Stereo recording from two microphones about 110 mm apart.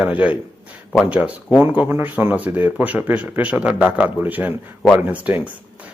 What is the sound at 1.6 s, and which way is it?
Speech, 20° right (ahead or behind).